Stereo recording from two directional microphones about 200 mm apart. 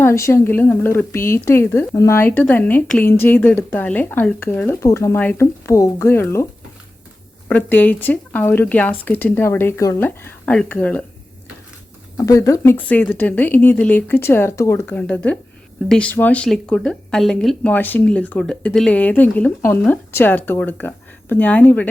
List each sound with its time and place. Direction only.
0.0 s a woman's voice: 15° left (ahead or behind)
12.1 s a woman's voice: 15° left (ahead or behind)